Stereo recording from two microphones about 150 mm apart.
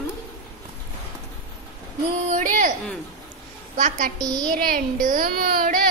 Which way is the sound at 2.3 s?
60° right (ahead or behind).